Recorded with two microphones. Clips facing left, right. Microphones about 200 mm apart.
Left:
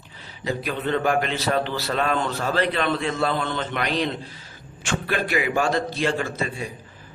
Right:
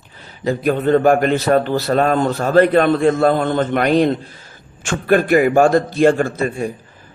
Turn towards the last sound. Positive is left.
turn(degrees=-50)  # may be behind; listen again after turning